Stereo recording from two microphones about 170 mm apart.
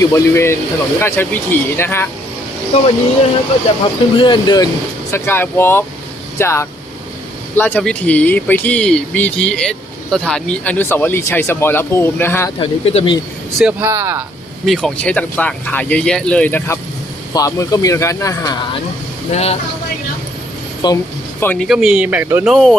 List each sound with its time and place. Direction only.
0.0 s speech: 15° left (ahead or behind)
2.7 s speech: 35° left (ahead or behind)
4.2 s speech: 25° left (ahead or behind)
5.1 s speech: 15° left (ahead or behind)
12.5 s speech: 40° left (ahead or behind)
13.6 s speech: 10° right (ahead or behind)
14.6 s speech: centre (ahead or behind); by 18.5 s 20° left (ahead or behind)
19.3 s speech: 40° left (ahead or behind)
20.8 s speech: 25° left (ahead or behind)
21.4 s speech: 10° left (ahead or behind)
21.7 s speech: 5° right (ahead or behind)
22.4 s speech: centre (ahead or behind)